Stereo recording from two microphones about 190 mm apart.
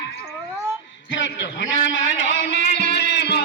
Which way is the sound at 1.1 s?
75° left (ahead or behind).